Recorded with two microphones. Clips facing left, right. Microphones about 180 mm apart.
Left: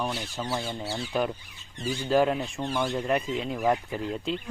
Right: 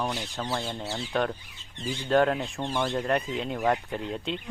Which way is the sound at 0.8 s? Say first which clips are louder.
Left 1 dB; 25° right (ahead or behind).